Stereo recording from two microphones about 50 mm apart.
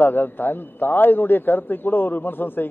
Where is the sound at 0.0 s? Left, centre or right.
Left.